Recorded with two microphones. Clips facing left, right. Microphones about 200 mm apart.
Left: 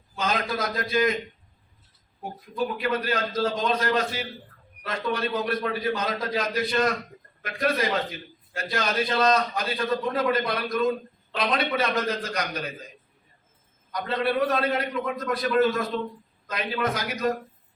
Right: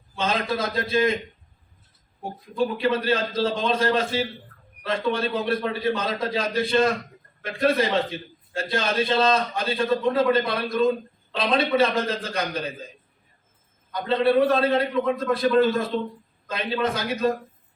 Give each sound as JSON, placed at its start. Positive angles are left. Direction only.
{"t": 0.2, "sound": "a man's voice", "side_deg": -30}
{"t": 2.2, "sound": "a man's voice", "side_deg": -30}
{"t": 13.9, "sound": "a man's voice", "side_deg": -25}